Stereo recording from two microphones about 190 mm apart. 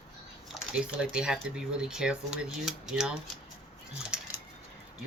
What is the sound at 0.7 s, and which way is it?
Speech, 5° right (ahead or behind).